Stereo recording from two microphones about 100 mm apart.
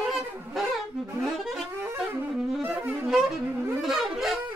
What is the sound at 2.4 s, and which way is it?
Wind instrument, 5° right (ahead or behind).